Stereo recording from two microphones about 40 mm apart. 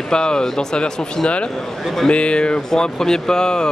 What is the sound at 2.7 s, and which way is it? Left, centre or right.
Speech, centre.